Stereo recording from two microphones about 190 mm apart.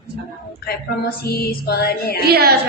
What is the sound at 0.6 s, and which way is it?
Female singing, 55° left (ahead or behind).